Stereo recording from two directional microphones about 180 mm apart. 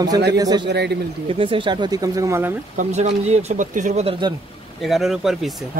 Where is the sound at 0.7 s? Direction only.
70° right (ahead or behind).